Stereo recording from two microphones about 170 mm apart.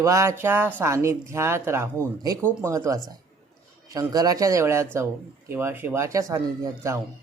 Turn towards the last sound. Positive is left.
turn(degrees=-15)  # may be behind; listen again after turning